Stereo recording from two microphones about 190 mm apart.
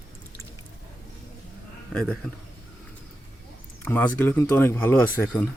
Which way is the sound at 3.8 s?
10° left (ahead or behind).